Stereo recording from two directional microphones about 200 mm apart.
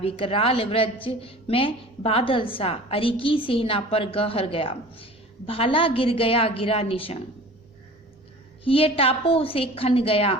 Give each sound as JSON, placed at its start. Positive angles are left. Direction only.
{"t": 0.0, "sound": "a woman's voice", "side_deg": 30}
{"t": 8.6, "sound": "a woman's voice", "side_deg": 30}